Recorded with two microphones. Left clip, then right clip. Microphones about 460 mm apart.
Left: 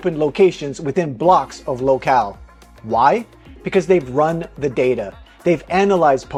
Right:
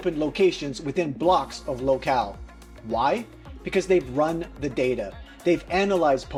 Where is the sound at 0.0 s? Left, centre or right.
Left.